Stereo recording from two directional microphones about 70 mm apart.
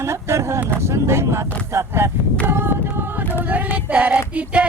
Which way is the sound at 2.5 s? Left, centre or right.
Right.